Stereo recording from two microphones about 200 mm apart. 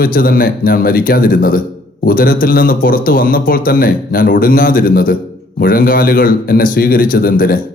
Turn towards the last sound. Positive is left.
turn(degrees=45)  # may be behind; listen again after turning